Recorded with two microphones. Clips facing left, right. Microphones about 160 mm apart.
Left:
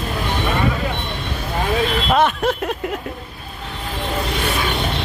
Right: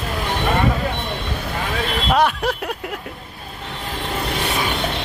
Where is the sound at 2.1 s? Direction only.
10° right (ahead or behind).